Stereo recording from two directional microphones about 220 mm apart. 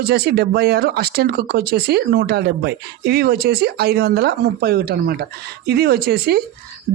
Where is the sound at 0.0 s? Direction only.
50° right (ahead or behind).